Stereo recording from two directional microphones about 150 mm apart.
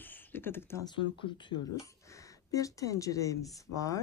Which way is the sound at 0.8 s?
35° left (ahead or behind).